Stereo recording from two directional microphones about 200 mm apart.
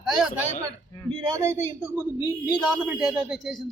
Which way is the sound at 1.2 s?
15° right (ahead or behind).